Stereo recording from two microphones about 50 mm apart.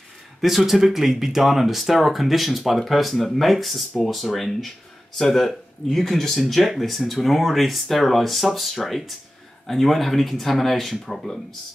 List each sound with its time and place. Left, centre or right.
0.4 s speech: centre